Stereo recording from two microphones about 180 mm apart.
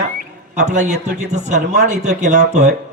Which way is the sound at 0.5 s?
40° right (ahead or behind).